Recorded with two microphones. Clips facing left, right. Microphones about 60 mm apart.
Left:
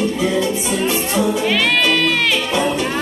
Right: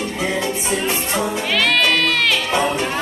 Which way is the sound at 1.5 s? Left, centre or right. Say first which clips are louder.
Left 1 dB; centre.